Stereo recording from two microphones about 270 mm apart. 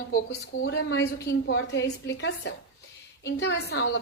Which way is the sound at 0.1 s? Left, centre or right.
Left.